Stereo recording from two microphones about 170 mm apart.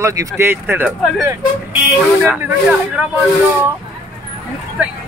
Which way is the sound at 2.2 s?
5° right (ahead or behind).